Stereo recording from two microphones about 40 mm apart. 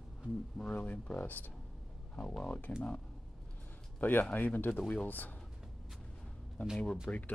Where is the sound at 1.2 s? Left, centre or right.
Left.